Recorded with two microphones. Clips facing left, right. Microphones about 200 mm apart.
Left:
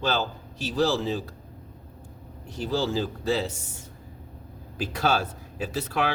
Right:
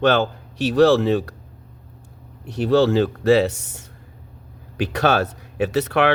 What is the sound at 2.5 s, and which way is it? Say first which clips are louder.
Speech: right 10 dB; 70° right (ahead or behind).